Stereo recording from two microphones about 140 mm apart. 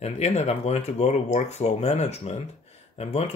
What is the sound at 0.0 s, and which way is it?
Speech, 50° left (ahead or behind).